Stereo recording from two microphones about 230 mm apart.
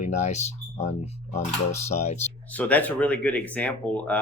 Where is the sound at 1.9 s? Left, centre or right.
Left.